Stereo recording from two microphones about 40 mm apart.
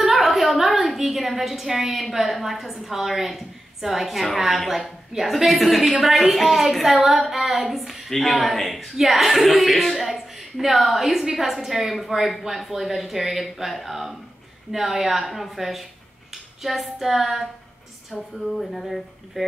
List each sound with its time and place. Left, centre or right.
0.0 s a woman's voice: centre